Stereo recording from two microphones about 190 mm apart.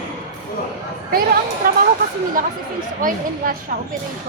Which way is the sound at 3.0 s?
45° right (ahead or behind).